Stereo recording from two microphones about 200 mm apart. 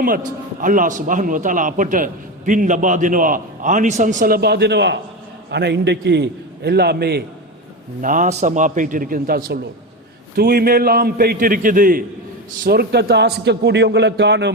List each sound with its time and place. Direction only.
0.6 s a man's voice: 40° right (ahead or behind)
8.0 s a man's voice: 40° right (ahead or behind); by 14.5 s 60° right (ahead or behind)